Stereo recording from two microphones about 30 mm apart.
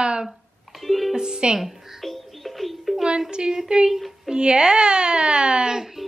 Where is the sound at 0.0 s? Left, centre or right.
Right.